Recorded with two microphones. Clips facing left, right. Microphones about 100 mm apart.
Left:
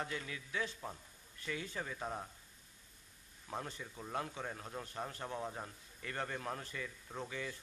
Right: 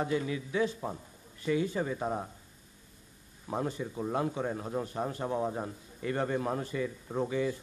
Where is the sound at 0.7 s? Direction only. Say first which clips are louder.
Right 9 dB; 35° right (ahead or behind).